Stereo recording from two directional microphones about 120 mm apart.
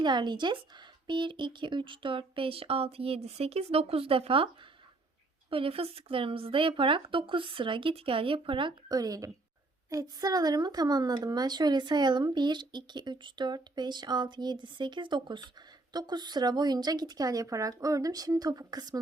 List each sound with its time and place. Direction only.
0.0 s a woman's voice: 40° right (ahead or behind)
5.5 s speech: 50° right (ahead or behind)
9.0 s a woman's voice: 30° right (ahead or behind)